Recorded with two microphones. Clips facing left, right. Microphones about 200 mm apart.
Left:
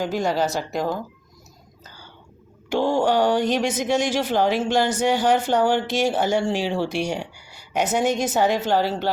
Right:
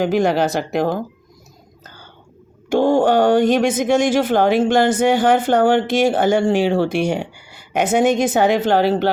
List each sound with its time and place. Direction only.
0.0 s speech: 60° right (ahead or behind)
1.8 s whispering: 55° right (ahead or behind)
2.6 s speech: 50° right (ahead or behind)